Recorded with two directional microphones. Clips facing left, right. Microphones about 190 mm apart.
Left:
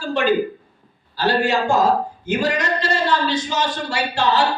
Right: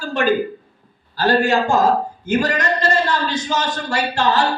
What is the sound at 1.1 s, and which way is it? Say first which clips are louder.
A man's voice: right 2 dB; 45° right (ahead or behind).